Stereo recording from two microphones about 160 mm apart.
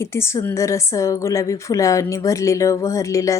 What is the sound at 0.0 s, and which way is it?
A woman's voice, 15° left (ahead or behind).